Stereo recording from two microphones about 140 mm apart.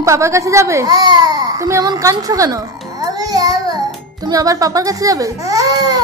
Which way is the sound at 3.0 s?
25° right (ahead or behind).